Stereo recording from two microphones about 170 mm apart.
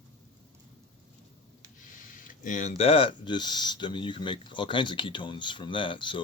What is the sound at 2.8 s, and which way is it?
Speech, 35° left (ahead or behind).